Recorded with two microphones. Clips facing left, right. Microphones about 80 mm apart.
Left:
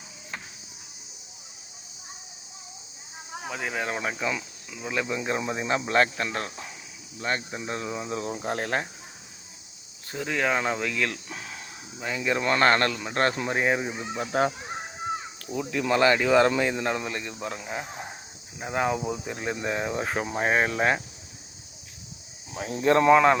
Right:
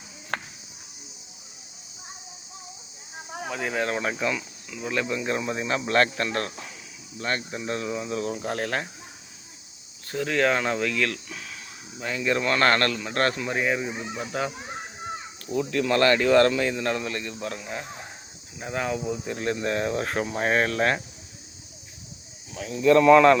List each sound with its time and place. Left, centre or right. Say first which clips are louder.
0.3 s music: right 8 dB; right
3.5 s speech: right 3 dB; centre; by 8.9 s left
10.1 s speech: right 3 dB; centre
11.3 s a sound: left 1 dB; left
11.9 s speech: right 1 dB; centre
13.3 s speech: left 1 dB; left
15.4 s speech: right 2 dB; centre
19.2 s speech: right 3 dB; centre
22.5 s speech: right 3 dB; left
23.1 s speech: right 4 dB; centre